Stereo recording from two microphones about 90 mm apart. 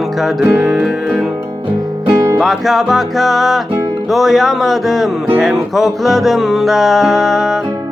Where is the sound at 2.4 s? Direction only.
Centre (ahead or behind).